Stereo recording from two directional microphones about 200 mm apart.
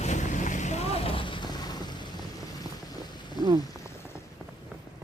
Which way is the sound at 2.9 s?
20° left (ahead or behind).